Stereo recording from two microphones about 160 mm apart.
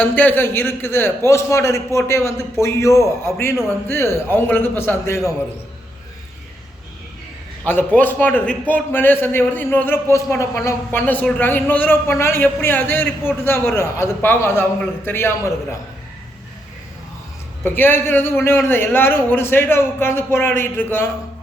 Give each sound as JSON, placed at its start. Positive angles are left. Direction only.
{"t": 0.0, "sound": "a man's voice", "side_deg": 10}
{"t": 7.6, "sound": "a man's voice", "side_deg": 10}
{"t": 17.6, "sound": "a man's voice", "side_deg": 10}